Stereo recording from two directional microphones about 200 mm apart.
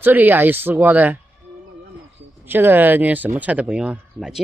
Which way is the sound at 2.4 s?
10° right (ahead or behind).